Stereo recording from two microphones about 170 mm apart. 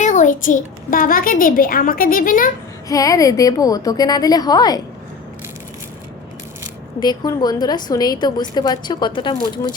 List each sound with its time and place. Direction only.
0.0 s a child's voice: 45° left (ahead or behind)
2.9 s a woman's voice: 20° left (ahead or behind)
7.0 s a woman's voice: 25° left (ahead or behind)